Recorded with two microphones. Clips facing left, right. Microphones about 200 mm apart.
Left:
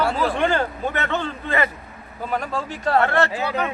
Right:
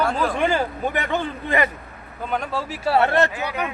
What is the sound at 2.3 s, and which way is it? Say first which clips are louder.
Speech: even; centre (ahead or behind).